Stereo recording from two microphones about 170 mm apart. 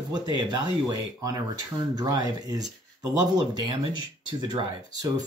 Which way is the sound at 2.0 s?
25° right (ahead or behind).